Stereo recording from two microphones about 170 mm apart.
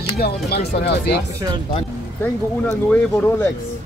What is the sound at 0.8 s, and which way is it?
Speech, 80° left.